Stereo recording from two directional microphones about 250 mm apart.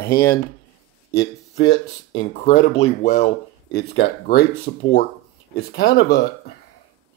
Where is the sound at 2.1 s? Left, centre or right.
Left.